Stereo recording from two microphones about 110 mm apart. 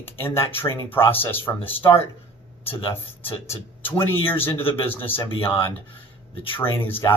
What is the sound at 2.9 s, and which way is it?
Speech, 20° left (ahead or behind).